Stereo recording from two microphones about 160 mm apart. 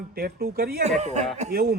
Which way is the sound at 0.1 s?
75° right (ahead or behind).